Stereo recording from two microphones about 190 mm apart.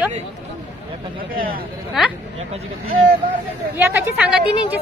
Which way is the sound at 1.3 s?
50° right (ahead or behind).